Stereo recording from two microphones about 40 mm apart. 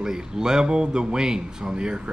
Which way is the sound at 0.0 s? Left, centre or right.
Centre.